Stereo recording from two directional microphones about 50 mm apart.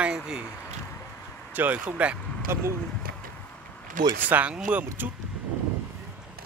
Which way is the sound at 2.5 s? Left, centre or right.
Right.